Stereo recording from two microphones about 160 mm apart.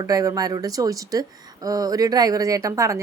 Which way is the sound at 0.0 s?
20° right (ahead or behind).